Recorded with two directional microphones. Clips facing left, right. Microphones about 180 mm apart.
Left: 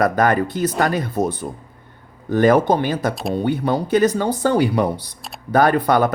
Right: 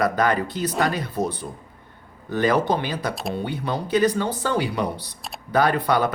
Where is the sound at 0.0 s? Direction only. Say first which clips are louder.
Left 4 dB; 50° left (ahead or behind).